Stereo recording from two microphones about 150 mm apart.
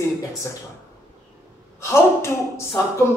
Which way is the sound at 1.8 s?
20° left (ahead or behind).